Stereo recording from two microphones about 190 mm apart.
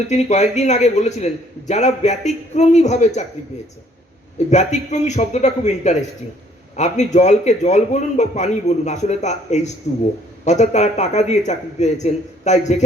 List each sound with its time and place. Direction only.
0.1 s a man's voice: 35° left (ahead or behind)
4.5 s a man's voice: 40° left (ahead or behind)